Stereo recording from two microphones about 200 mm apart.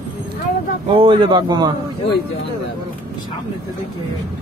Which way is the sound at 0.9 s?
25° right (ahead or behind).